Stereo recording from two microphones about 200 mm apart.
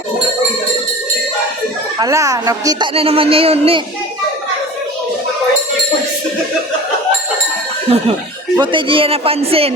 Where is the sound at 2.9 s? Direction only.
30° right (ahead or behind).